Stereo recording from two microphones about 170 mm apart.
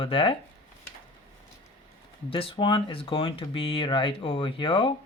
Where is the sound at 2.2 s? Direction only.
30° left (ahead or behind).